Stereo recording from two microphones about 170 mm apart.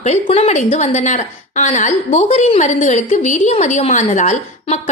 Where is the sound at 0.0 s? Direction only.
40° left (ahead or behind).